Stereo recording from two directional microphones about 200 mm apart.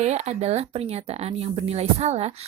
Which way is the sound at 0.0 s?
35° right (ahead or behind).